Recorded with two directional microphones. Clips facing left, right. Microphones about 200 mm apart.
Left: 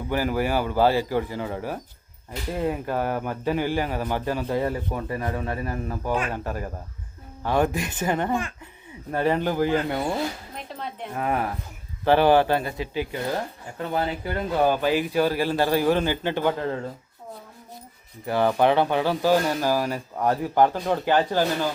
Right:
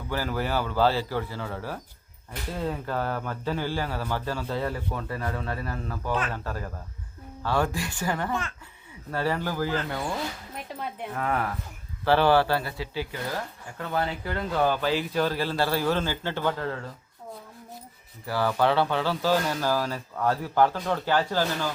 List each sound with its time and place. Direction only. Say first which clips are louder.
0.1 s speech: left 4 dB; 15° left (ahead or behind)
10.8 s speech: even; 10° right (ahead or behind)
11.1 s speech: left 3 dB; 20° left (ahead or behind)
18.3 s speech: left 4 dB; 20° left (ahead or behind)